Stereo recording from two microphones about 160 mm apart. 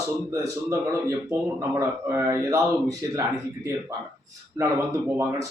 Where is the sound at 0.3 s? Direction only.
20° right (ahead or behind).